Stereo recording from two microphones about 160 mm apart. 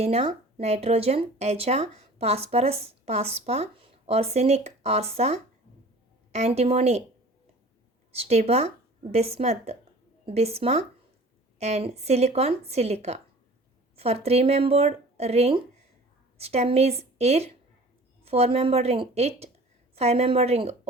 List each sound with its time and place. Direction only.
0.0 s speech: 40° right (ahead or behind)
8.1 s speech: 40° right (ahead or behind)